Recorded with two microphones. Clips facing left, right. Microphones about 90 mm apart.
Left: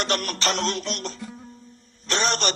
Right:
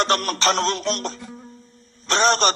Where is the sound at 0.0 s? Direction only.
40° right (ahead or behind).